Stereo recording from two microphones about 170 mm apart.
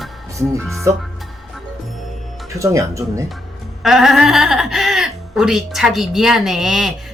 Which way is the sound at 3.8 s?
Centre (ahead or behind).